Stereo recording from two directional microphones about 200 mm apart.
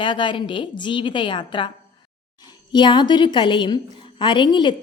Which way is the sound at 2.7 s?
20° left (ahead or behind).